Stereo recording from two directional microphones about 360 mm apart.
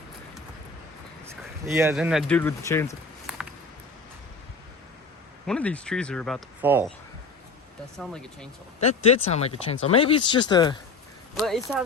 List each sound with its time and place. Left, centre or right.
1.3 s speech: centre
5.5 s speech: centre
7.9 s speech: centre
8.8 s speech: centre
11.3 s speech: centre